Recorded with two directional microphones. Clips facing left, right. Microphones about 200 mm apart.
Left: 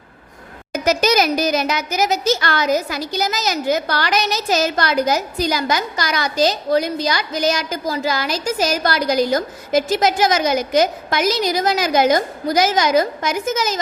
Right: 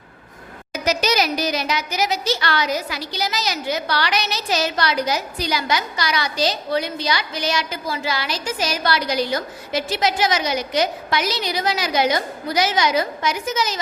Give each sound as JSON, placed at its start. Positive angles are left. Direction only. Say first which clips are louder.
{"t": 0.7, "sound": "speech", "louder": "left 4 dB", "side_deg": 50}